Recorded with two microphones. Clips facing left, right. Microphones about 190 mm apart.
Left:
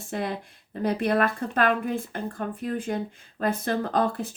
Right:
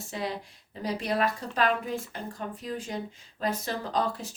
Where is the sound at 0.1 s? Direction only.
55° left (ahead or behind).